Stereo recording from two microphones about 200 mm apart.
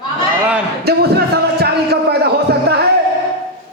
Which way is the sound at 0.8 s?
50° right (ahead or behind).